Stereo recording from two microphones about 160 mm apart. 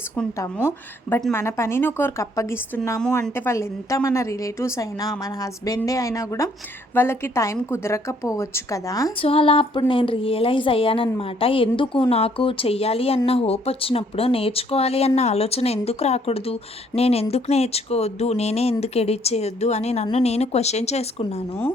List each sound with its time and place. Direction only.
1.3 s a woman's voice: 15° left (ahead or behind)
9.2 s a woman's voice: 35° left (ahead or behind)